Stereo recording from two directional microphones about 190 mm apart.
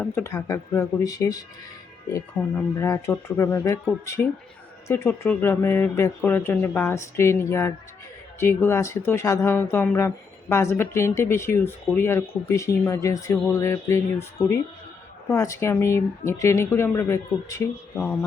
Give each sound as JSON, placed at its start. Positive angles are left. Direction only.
{"t": 0.0, "sound": "speech", "side_deg": 10}
{"t": 2.7, "sound": "speech", "side_deg": 15}